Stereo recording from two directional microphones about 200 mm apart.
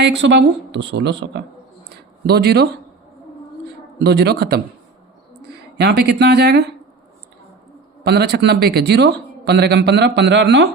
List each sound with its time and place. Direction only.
0.0 s a man's voice: 60° right (ahead or behind)
4.0 s a man's voice: 55° right (ahead or behind)
5.7 s a man's voice: 55° right (ahead or behind)
8.0 s a man's voice: 55° right (ahead or behind)